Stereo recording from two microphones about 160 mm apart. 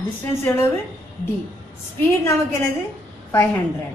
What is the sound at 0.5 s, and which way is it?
Speech, 10° left (ahead or behind).